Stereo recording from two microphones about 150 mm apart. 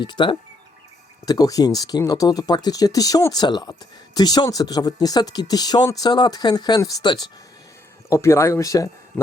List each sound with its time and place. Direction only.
0.0 s speech: 30° left (ahead or behind)
8.1 s speech: 20° left (ahead or behind)